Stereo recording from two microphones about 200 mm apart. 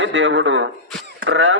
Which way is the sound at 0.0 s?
65° right (ahead or behind).